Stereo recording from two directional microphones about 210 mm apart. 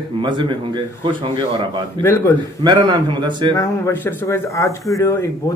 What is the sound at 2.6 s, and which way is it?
Speech, 20° right (ahead or behind).